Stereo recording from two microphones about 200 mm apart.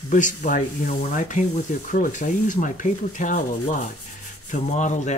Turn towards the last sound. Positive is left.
turn(degrees=35)  # may be behind; listen again after turning